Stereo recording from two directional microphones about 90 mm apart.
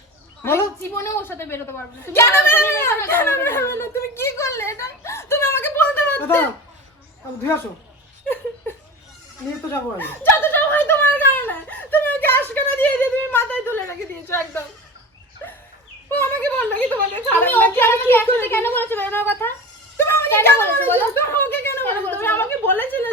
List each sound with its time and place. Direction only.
0.4 s a woman's voice: 30° left (ahead or behind)
9.6 s a sound: 25° left (ahead or behind)
16.0 s a woman's voice: 25° left (ahead or behind)